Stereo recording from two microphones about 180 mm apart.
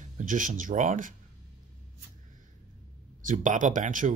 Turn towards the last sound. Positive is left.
turn(degrees=-45)  # may be behind; listen again after turning